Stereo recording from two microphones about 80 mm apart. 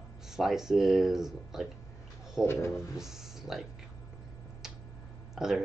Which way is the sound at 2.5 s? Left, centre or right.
Left.